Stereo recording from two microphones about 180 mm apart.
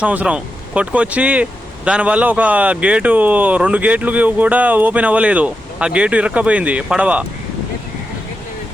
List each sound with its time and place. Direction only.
0.0 s speech: 5° right (ahead or behind)